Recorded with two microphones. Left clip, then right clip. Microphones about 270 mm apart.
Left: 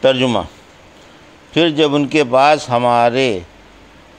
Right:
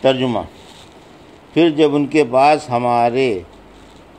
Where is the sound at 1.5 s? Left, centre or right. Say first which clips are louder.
Even; left.